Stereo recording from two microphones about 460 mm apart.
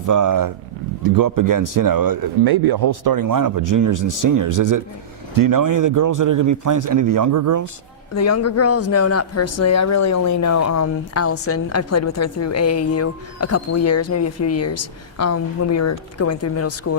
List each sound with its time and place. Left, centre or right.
0.0 s a man's voice: right
8.1 s speech: left